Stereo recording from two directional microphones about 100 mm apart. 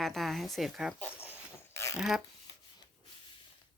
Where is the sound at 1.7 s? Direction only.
30° left (ahead or behind).